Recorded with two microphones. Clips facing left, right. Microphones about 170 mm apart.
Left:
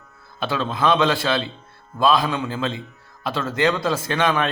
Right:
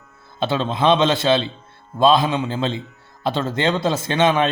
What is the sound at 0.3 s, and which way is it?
Speech, 25° right (ahead or behind).